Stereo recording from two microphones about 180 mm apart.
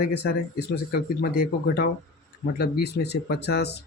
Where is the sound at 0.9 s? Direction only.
60° left (ahead or behind).